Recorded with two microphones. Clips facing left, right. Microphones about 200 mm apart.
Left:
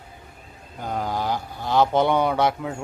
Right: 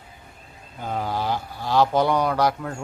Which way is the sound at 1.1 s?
15° left (ahead or behind).